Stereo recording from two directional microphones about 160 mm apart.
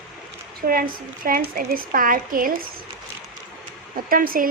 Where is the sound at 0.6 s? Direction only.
65° right (ahead or behind).